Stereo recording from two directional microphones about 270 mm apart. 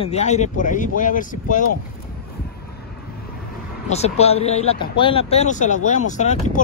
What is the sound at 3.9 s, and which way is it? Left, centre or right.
Speech, left.